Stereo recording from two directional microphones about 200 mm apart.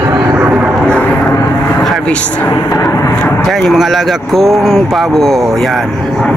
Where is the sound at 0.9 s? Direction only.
5° left (ahead or behind).